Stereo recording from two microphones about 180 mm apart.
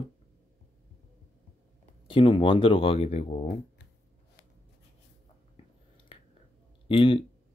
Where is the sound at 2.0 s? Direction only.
25° left (ahead or behind).